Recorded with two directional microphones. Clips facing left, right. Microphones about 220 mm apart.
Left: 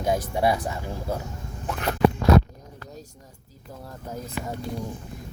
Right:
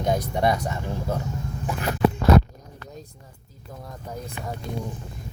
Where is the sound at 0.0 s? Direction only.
5° left (ahead or behind).